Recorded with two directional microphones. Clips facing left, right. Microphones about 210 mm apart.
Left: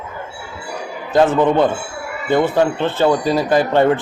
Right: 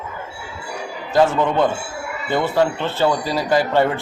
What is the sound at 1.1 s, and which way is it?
A man's voice, 20° left (ahead or behind).